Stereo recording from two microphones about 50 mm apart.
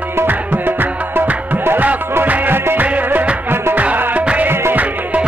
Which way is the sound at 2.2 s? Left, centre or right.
Right.